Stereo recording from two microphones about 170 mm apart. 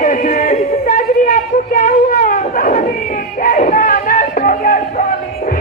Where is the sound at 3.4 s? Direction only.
50° left (ahead or behind).